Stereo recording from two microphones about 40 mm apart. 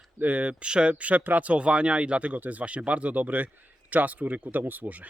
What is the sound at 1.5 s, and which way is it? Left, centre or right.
Speech, right.